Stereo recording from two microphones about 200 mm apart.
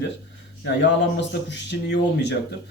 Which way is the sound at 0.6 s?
60° left (ahead or behind).